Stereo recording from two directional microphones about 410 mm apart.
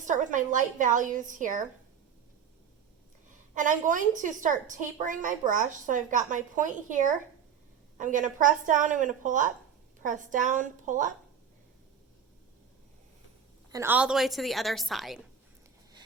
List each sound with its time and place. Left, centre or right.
0.0 s a woman's voice: centre
3.5 s a woman's voice: centre
13.7 s a woman's voice: centre